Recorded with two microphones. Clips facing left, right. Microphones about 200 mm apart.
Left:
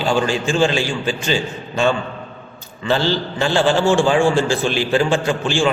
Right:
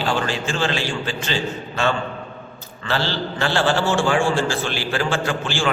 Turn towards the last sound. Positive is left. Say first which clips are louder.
# left 5 dB
turn(degrees=15)  # may be behind; listen again after turning